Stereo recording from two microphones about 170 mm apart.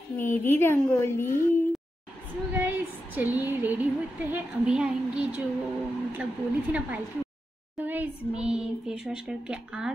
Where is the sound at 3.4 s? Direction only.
10° right (ahead or behind).